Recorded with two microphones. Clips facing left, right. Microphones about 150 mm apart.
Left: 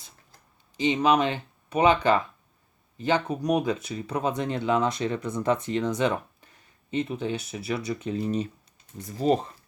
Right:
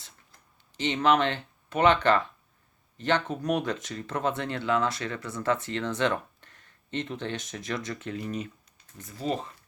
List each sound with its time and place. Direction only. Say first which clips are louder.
0.8 s speech: left 2 dB; 10° left (ahead or behind)
8.2 s speech: left 6 dB; 30° left (ahead or behind)